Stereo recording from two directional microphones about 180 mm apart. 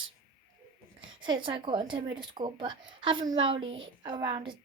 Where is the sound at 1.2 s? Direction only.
30° right (ahead or behind).